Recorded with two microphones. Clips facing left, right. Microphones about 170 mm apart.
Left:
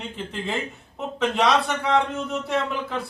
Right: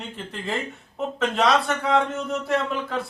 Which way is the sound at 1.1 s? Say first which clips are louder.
Even; centre (ahead or behind).